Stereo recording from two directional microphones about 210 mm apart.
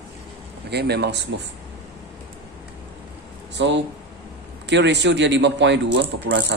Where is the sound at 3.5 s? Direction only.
55° right (ahead or behind).